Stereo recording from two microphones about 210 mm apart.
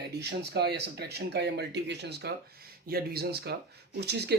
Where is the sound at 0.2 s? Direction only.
50° right (ahead or behind).